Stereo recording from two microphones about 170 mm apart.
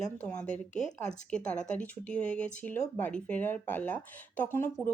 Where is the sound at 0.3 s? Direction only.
5° left (ahead or behind).